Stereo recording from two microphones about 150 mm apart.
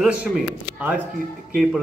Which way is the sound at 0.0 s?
5° right (ahead or behind).